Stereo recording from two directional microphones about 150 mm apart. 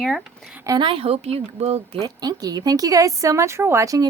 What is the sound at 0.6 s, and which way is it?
Speech, 30° right (ahead or behind).